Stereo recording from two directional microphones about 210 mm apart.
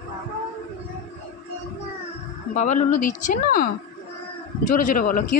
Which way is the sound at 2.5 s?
35° left (ahead or behind).